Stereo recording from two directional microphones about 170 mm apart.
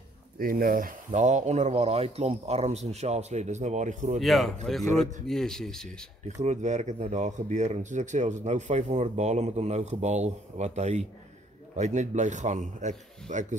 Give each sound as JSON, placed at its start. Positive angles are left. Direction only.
{"t": 0.4, "sound": "speech", "side_deg": -60}
{"t": 4.2, "sound": "speech", "side_deg": 0}
{"t": 6.4, "sound": "speech", "side_deg": -45}